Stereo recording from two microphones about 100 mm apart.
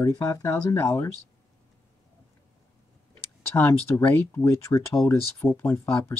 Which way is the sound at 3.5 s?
25° left (ahead or behind).